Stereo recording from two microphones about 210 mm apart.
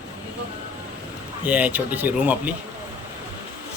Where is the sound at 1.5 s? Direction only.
5° right (ahead or behind).